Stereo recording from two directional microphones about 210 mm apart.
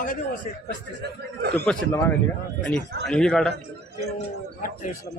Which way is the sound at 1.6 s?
10° left (ahead or behind).